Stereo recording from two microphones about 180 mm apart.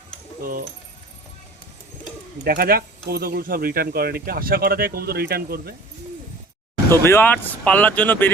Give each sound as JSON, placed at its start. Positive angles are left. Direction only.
{"t": 2.4, "sound": "speech", "side_deg": -55}
{"t": 7.0, "sound": "speech", "side_deg": 15}